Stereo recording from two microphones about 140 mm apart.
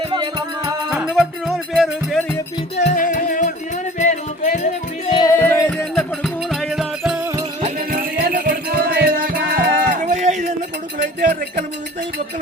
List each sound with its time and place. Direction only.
0.1 s music: 30° right (ahead or behind)
0.9 s music: 5° right (ahead or behind)
2.7 s music: 55° left (ahead or behind)
3.0 s music: 75° left (ahead or behind)
3.9 s music: 60° left (ahead or behind)
5.3 s music: 20° left (ahead or behind); by 7.2 s 5° right (ahead or behind)
7.6 s music: 75° right (ahead or behind); by 10.5 s 60° right (ahead or behind)